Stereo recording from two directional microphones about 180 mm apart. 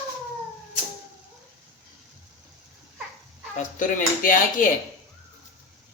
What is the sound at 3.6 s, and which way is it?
Speech, 45° left (ahead or behind).